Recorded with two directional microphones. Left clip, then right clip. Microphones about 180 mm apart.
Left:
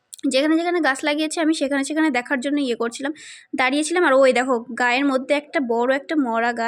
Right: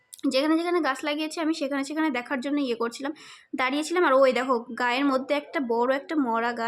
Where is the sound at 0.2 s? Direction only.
20° left (ahead or behind).